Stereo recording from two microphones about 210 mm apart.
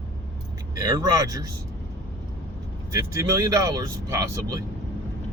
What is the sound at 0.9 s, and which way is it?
Speech, 15° right (ahead or behind).